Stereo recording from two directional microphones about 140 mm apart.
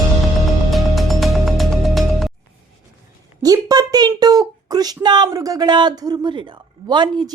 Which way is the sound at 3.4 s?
25° right (ahead or behind).